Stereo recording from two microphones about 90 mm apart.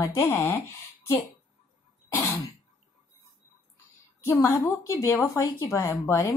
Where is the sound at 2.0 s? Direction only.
35° left (ahead or behind).